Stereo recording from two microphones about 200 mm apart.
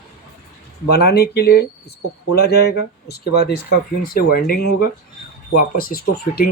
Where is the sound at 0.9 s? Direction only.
55° left (ahead or behind).